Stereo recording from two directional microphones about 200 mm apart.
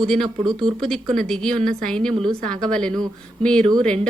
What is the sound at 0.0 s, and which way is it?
A woman's voice, centre (ahead or behind).